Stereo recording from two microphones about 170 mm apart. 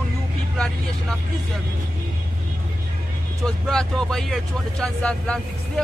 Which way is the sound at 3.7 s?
5° left (ahead or behind).